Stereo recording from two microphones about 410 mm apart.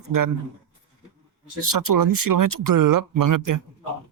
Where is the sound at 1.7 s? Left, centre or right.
Right.